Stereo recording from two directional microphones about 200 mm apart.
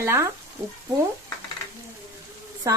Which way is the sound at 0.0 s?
15° right (ahead or behind).